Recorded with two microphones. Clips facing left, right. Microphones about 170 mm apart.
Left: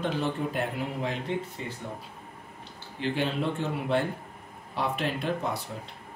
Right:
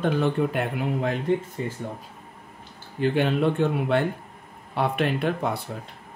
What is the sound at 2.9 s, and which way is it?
Speech, 55° right (ahead or behind).